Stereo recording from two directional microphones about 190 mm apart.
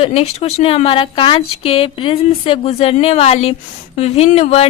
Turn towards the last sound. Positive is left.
turn(degrees=35)  # may be behind; listen again after turning